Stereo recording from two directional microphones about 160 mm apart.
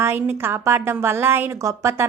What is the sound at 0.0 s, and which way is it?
A woman's voice, 15° right (ahead or behind).